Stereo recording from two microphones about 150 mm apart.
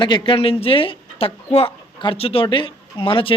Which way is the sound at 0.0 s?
35° left (ahead or behind).